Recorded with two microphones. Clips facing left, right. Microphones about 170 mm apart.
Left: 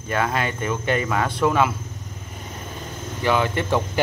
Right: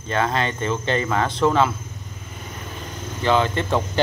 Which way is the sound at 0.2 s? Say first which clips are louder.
Right 2 dB; 10° left (ahead or behind).